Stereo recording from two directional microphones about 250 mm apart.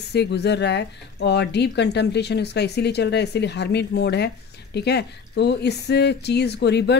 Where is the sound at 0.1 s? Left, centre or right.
Left.